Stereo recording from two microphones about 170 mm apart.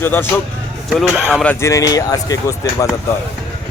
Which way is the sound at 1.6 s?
20° left (ahead or behind).